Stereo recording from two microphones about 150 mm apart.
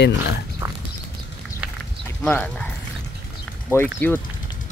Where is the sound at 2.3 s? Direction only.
10° left (ahead or behind).